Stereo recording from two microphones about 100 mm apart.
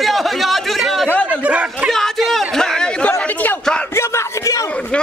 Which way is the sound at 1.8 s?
5° left (ahead or behind).